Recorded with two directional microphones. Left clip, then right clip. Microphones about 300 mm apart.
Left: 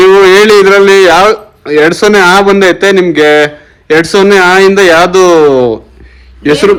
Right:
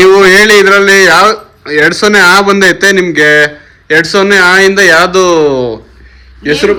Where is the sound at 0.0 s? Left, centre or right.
Left.